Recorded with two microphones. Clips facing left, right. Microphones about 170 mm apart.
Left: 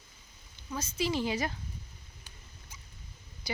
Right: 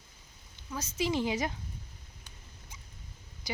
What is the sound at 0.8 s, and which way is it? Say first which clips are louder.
Speech: right 1 dB; 20° right (ahead or behind).